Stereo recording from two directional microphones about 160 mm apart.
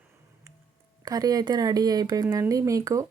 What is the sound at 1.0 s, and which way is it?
Speech, 25° right (ahead or behind).